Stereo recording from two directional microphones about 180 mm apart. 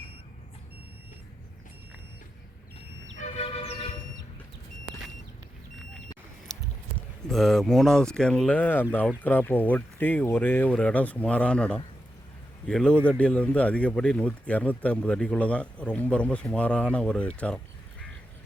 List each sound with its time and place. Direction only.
3.2 s train: 35° left (ahead or behind)
7.3 s speech: centre (ahead or behind)